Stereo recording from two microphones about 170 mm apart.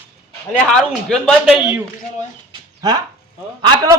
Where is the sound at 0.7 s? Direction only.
5° left (ahead or behind).